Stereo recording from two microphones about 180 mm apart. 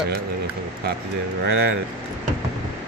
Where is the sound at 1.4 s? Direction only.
75° right (ahead or behind).